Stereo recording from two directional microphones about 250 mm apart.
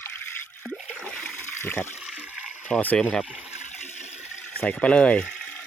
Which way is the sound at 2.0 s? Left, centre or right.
Centre.